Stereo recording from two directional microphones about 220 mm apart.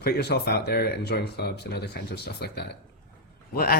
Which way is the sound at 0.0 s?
45° left (ahead or behind).